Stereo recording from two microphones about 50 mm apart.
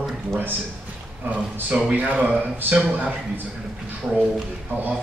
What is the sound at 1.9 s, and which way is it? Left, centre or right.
Speech, right.